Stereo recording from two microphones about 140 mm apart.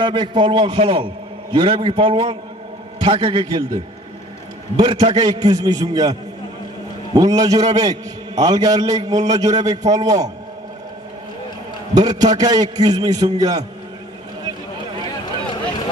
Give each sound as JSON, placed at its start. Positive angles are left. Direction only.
{"t": 0.0, "sound": "a man's voice", "side_deg": -35}
{"t": 7.2, "sound": "a man's voice", "side_deg": -25}
{"t": 11.9, "sound": "a man's voice", "side_deg": -30}